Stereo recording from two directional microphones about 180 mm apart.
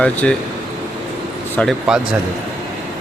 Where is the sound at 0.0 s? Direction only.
5° left (ahead or behind).